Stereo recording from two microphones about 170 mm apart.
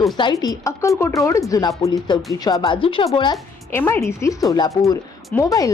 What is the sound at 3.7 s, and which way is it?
Speech, 15° left (ahead or behind).